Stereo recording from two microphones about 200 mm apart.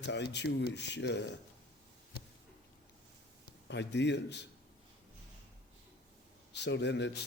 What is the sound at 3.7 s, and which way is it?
Speech, 60° left (ahead or behind).